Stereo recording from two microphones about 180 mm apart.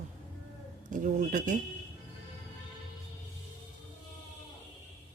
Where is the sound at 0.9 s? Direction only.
45° right (ahead or behind).